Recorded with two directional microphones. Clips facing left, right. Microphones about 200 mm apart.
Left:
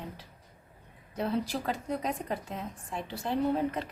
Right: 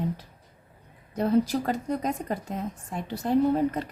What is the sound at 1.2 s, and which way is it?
Speech, 40° right (ahead or behind).